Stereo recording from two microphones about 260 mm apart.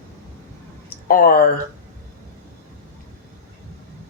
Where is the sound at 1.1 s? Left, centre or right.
Left.